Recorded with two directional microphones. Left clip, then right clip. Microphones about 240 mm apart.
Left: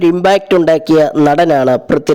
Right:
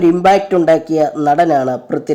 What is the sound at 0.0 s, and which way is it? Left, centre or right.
Speech, left.